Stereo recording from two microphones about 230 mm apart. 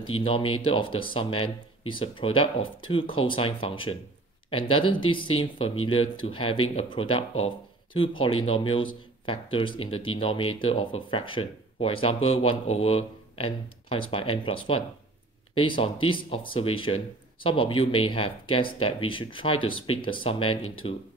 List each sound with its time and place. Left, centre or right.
0.1 s speech: left